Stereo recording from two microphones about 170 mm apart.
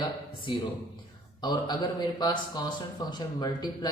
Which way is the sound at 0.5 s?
30° left (ahead or behind).